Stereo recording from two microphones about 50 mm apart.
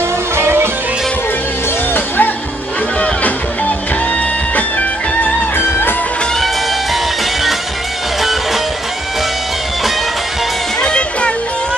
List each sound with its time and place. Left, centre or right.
0.4 s music: right
2.0 s music: left
5.6 s music: left
10.8 s music: centre